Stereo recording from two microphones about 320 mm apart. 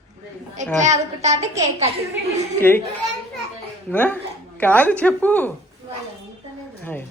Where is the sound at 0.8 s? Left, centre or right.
Right.